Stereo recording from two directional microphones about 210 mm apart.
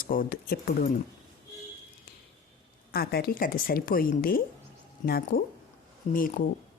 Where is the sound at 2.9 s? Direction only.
45° left (ahead or behind).